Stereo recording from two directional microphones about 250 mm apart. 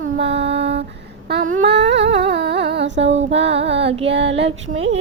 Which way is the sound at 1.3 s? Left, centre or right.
Right.